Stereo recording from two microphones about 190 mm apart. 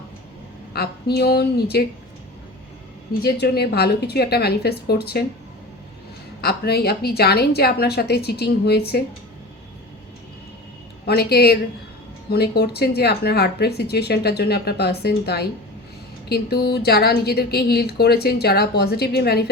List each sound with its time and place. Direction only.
0.7 s a woman's voice: 55° left (ahead or behind)
3.1 s a woman's voice: 60° left (ahead or behind)
6.4 s a woman's voice: 55° left (ahead or behind)
11.0 s a woman's voice: 55° left (ahead or behind)